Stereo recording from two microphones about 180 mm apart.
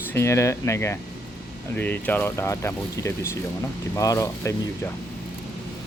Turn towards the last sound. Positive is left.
turn(degrees=15)  # may be behind; listen again after turning